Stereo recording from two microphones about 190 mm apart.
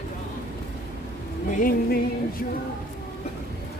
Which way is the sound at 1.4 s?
45° left (ahead or behind).